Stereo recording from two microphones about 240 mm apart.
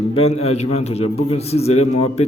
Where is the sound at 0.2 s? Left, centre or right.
Left.